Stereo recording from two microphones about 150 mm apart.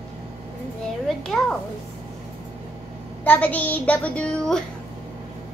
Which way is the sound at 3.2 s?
10° left (ahead or behind).